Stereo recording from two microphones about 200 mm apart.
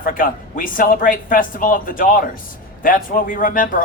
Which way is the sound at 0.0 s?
45° left (ahead or behind).